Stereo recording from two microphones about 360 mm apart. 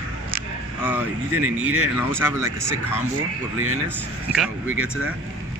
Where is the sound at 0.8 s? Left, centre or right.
Centre.